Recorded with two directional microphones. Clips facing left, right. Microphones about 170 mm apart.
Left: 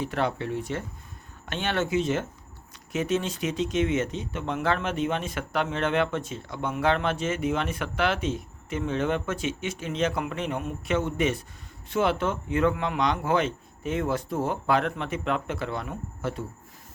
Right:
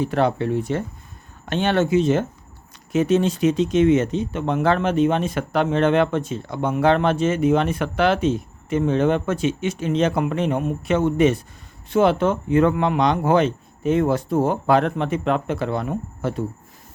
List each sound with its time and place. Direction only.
0.0 s speech: 35° right (ahead or behind)